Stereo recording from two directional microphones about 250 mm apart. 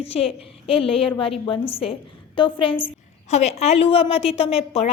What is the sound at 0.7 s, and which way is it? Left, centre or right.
A woman's voice, left.